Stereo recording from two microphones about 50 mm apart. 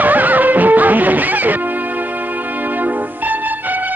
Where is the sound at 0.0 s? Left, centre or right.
Right.